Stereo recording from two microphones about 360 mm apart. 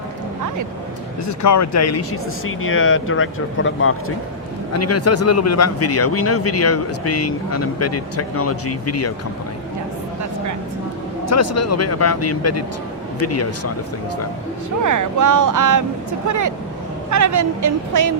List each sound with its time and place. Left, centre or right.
1.3 s a man's voice: left
11.3 s a man's voice: left
14.8 s a woman's voice: right